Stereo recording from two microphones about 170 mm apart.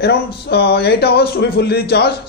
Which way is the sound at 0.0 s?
75° left (ahead or behind).